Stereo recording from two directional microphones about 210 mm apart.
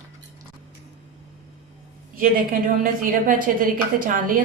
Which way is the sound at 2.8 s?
40° right (ahead or behind).